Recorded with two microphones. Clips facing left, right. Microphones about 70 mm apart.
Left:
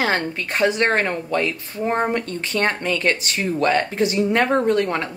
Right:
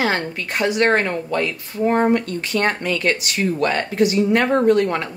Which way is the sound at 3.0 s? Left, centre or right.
Left.